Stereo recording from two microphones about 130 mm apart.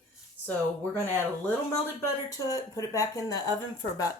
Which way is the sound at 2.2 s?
25° left (ahead or behind).